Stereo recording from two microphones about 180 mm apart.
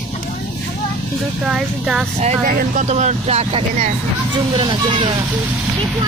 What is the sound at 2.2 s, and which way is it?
Speech, 40° right (ahead or behind).